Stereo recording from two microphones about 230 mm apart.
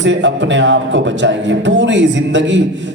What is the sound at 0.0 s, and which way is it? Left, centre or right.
Speech, right.